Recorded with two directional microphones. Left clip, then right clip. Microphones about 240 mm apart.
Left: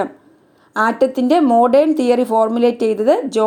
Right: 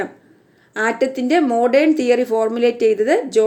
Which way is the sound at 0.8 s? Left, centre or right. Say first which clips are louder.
Left 3 dB; centre.